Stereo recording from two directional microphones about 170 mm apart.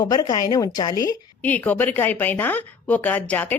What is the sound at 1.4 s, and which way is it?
Speech, 10° left (ahead or behind).